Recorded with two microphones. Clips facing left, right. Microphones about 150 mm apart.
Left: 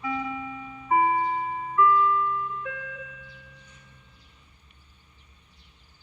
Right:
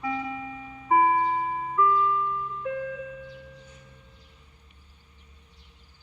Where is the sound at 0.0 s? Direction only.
35° right (ahead or behind).